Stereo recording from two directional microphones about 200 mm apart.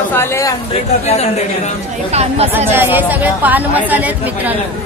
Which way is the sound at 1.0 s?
35° left (ahead or behind).